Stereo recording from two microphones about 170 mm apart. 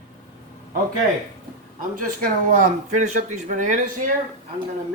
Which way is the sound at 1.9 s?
55° right (ahead or behind).